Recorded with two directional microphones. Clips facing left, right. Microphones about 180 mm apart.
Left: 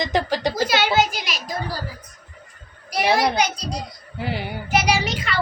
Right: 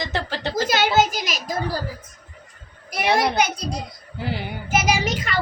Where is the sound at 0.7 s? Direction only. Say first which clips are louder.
Right 3 dB; 45° right (ahead or behind).